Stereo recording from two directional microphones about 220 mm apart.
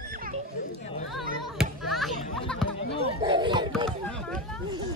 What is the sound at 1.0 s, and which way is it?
Music, centre (ahead or behind).